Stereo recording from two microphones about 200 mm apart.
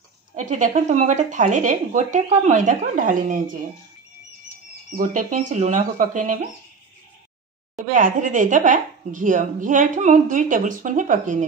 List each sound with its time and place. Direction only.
0.4 s speech: 40° right (ahead or behind)
4.9 s speech: 40° right (ahead or behind)
7.7 s speech: 40° right (ahead or behind)